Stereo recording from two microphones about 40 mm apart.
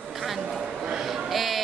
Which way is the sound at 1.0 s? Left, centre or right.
Centre.